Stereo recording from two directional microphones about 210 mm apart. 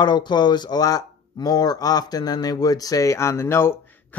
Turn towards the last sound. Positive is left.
turn(degrees=10)  # may be behind; listen again after turning